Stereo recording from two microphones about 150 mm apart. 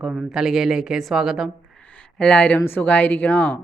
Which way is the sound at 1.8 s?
10° left (ahead or behind).